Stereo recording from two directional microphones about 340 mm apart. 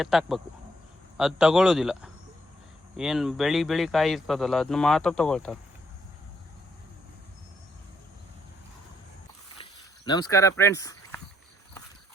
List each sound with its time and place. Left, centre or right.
0.0 s speech: centre
10.1 s speech: centre